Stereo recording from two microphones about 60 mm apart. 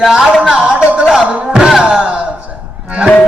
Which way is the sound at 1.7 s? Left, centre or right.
Centre.